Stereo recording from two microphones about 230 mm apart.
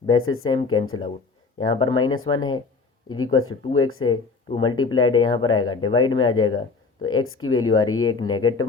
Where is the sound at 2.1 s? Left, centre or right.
Left.